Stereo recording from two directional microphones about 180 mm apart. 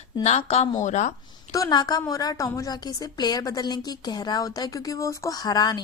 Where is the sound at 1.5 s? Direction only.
20° left (ahead or behind).